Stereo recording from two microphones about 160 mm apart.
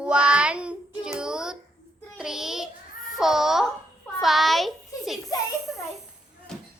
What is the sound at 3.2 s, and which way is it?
A woman's voice, centre (ahead or behind).